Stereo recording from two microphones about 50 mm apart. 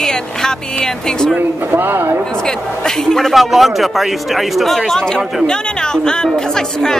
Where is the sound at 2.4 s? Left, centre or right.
Centre.